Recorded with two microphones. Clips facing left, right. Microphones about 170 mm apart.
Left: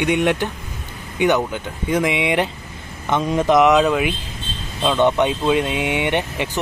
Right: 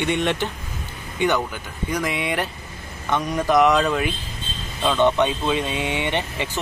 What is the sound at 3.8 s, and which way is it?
Speech, 10° left (ahead or behind).